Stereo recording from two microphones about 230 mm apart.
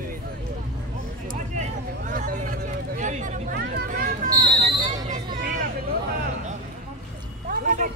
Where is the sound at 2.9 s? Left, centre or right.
Right.